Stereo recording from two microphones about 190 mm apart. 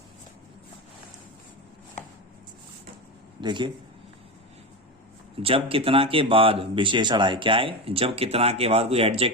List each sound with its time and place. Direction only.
3.4 s speech: 25° right (ahead or behind)
5.4 s speech: 30° right (ahead or behind)